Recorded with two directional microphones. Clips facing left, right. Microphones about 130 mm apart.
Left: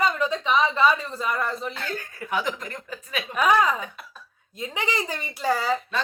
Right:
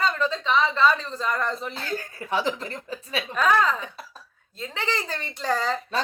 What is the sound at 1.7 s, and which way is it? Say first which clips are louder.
Speech: right 1 dB; 35° right (ahead or behind).